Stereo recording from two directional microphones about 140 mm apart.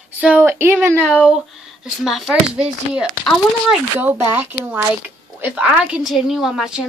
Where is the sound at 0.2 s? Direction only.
10° right (ahead or behind).